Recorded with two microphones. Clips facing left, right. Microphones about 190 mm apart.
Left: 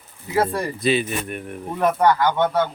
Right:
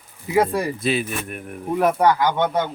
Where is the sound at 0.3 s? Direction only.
10° right (ahead or behind).